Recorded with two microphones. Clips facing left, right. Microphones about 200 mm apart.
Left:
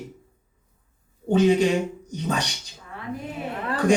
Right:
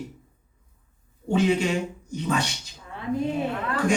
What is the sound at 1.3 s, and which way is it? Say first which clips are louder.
Speech: left 4 dB; 35° left (ahead or behind).